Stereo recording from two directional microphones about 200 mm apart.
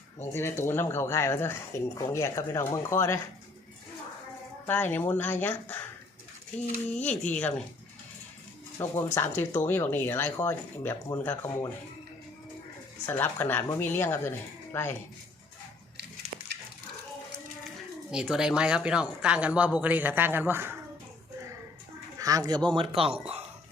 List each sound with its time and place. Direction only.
0.3 s speech: 10° left (ahead or behind)
4.6 s speech: 10° left (ahead or behind)
8.8 s speech: 15° left (ahead or behind)
13.1 s speech: 10° left (ahead or behind)
18.1 s speech: 5° right (ahead or behind)
22.2 s speech: 15° right (ahead or behind)